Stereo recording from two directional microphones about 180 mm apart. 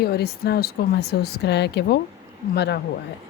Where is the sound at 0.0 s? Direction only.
60° left (ahead or behind).